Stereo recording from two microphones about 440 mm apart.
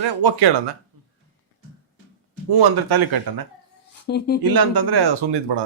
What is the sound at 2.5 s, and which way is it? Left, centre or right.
Speech, right.